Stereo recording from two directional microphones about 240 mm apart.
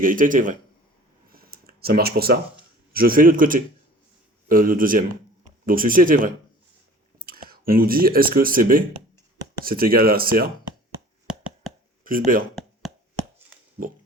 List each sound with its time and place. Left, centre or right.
0.0 s speech: right
1.3 s a sound: right
2.9 s speech: right
12.0 s speech: right